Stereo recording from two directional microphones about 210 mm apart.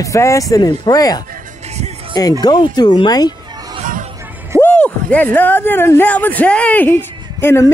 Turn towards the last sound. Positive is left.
turn(degrees=10)  # may be behind; listen again after turning